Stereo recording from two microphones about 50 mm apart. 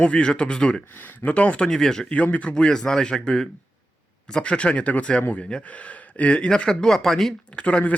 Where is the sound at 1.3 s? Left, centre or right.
Left.